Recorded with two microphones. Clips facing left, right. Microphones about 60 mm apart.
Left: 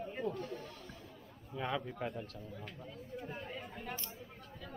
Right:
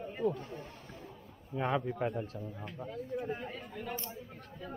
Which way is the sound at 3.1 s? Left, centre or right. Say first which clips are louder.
Right 8 dB; right.